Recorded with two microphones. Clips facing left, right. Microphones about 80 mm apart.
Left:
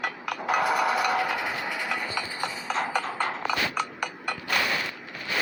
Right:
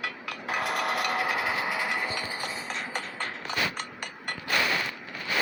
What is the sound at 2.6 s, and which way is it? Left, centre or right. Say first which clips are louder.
Clip-clop: left 7 dB; left.